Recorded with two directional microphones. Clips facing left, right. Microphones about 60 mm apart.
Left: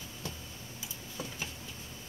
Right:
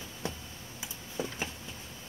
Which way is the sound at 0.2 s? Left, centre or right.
Right.